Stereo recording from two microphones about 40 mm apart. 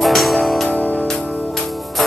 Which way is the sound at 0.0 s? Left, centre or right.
Centre.